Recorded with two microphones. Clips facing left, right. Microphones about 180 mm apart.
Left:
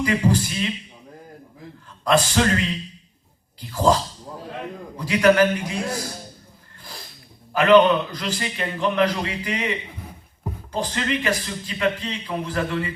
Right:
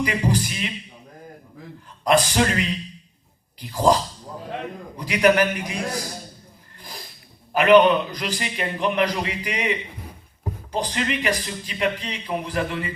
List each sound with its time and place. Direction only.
0.0 s a man's voice: 15° right (ahead or behind)
2.0 s a man's voice: 15° right (ahead or behind)
4.9 s a man's voice: 15° right (ahead or behind)
7.5 s a man's voice: 15° right (ahead or behind)